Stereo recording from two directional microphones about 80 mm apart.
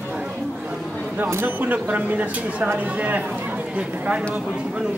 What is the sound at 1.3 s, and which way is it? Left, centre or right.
Speech, right.